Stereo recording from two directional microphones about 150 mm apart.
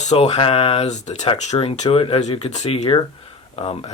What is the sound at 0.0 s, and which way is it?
Speech, 50° left (ahead or behind).